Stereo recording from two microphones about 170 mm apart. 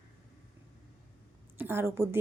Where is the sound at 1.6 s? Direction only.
15° right (ahead or behind).